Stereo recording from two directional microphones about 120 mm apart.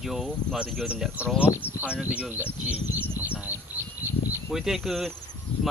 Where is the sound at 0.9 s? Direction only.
10° right (ahead or behind).